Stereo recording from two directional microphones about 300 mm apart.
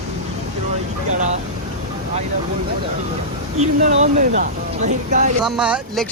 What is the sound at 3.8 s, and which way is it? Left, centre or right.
Speech, right.